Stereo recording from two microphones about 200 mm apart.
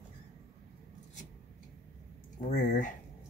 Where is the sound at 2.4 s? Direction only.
40° left (ahead or behind).